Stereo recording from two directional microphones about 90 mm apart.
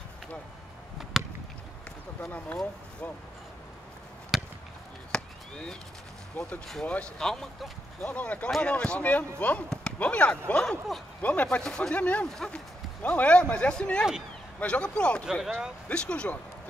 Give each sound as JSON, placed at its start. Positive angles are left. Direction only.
{"t": 1.1, "sound": "chop", "side_deg": 0}
{"t": 2.2, "sound": "speech", "side_deg": 15}
{"t": 4.3, "sound": "chop", "side_deg": -5}
{"t": 5.1, "sound": "chop", "side_deg": 10}
{"t": 6.4, "sound": "speech", "side_deg": 10}